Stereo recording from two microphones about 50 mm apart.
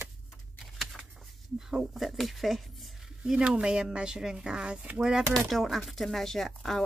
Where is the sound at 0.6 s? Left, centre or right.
Centre.